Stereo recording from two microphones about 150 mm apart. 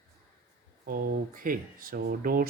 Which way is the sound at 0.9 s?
70° right (ahead or behind).